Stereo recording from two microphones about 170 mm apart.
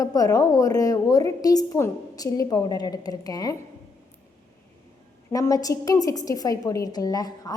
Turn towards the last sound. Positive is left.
turn(degrees=20)  # may be behind; listen again after turning